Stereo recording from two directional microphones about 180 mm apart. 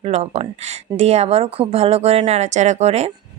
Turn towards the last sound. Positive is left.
turn(degrees=-40)  # may be behind; listen again after turning